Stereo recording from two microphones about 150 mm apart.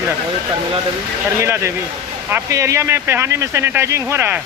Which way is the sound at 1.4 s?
20° right (ahead or behind).